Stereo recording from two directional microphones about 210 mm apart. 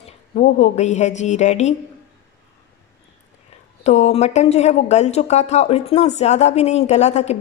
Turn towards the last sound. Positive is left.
turn(degrees=30)  # may be behind; listen again after turning